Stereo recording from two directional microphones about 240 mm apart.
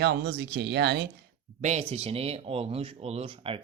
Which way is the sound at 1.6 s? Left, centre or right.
Right.